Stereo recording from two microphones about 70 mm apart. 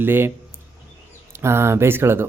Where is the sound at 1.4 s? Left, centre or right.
Right.